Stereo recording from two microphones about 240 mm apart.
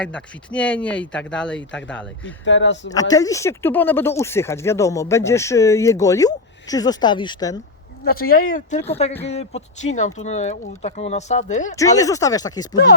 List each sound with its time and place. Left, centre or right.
0.0 s speech: centre
2.2 s speech: left
2.9 s speech: centre
8.0 s speech: left
11.8 s speech: centre